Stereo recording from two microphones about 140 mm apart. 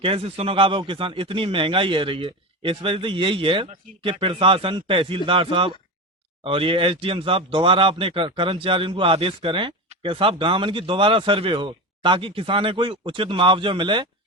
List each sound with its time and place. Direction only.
0.0 s speech: 40° right (ahead or behind)